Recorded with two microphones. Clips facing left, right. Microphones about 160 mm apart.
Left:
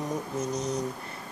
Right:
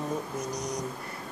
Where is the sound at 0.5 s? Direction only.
15° right (ahead or behind).